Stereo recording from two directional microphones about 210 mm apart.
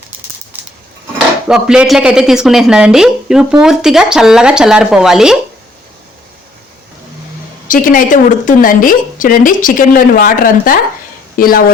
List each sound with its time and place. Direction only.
0.5 s a sound: 10° right (ahead or behind)
1.5 s speech: 5° right (ahead or behind)
7.7 s a woman's voice: 40° left (ahead or behind)